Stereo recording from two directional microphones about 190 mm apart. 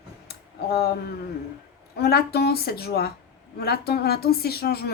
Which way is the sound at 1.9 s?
55° left (ahead or behind).